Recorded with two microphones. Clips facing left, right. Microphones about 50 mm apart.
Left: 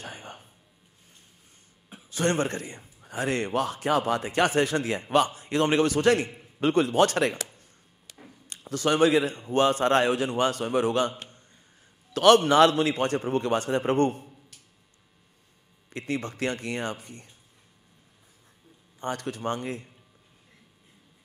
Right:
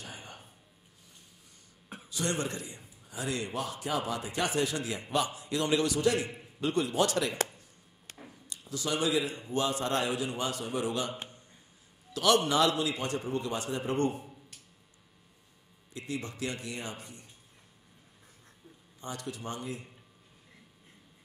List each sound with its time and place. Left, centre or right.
0.0 s a sound: left
2.0 s a man's voice: left
8.1 s a sound: right
8.5 s a man's voice: left
15.9 s a man's voice: left
18.9 s a man's voice: left